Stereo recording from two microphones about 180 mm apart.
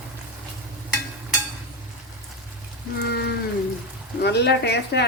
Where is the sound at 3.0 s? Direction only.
65° left (ahead or behind).